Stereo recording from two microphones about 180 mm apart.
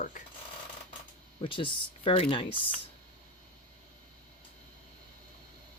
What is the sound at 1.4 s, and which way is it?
Speech, 30° left (ahead or behind).